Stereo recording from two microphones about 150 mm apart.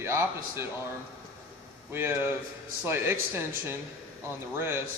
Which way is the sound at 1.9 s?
15° right (ahead or behind).